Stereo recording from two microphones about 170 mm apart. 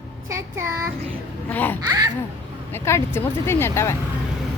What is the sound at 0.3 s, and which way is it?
Child singing, 15° right (ahead or behind).